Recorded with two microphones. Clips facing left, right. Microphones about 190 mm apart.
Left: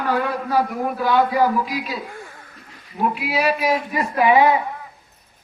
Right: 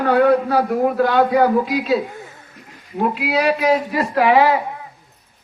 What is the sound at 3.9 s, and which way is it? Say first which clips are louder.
Speech: right 2 dB; 75° right (ahead or behind).